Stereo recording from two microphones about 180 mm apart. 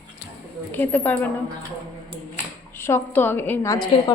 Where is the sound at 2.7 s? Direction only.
15° left (ahead or behind).